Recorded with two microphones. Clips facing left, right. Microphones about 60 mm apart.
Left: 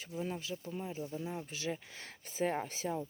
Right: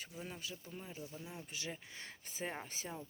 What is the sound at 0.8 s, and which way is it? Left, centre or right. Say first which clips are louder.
Speech: left 9 dB; left.